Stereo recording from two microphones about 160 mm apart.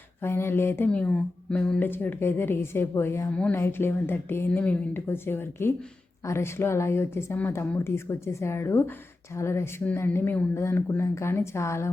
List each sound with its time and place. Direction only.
0.2 s speech: 15° left (ahead or behind)